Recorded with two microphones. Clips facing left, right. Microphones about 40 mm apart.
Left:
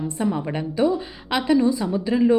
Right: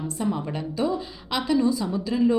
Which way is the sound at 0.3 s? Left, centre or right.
Left.